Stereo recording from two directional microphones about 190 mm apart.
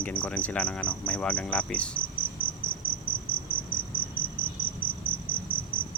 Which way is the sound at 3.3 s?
5° left (ahead or behind).